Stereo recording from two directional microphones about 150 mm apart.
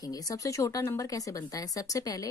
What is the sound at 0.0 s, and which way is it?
Speech, 25° left (ahead or behind).